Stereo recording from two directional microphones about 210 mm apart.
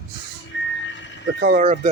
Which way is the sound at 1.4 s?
40° right (ahead or behind).